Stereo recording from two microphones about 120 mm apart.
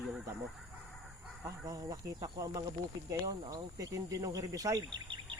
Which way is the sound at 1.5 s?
30° right (ahead or behind).